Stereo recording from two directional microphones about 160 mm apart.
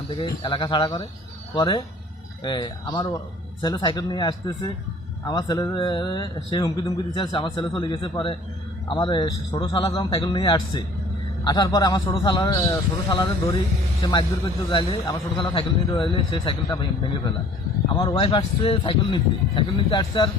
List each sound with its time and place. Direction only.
0.2 s speech: 30° left (ahead or behind)
17.9 s speech: 30° left (ahead or behind)